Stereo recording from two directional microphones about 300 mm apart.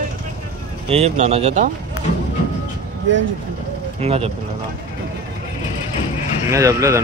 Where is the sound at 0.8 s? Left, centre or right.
Right.